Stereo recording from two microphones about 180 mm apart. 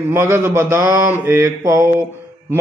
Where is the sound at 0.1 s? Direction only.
15° right (ahead or behind).